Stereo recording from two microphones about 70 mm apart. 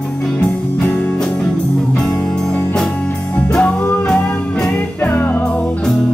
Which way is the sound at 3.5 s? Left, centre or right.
Centre.